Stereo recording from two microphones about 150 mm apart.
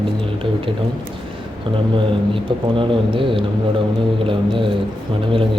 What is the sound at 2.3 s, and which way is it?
Speech, 35° right (ahead or behind).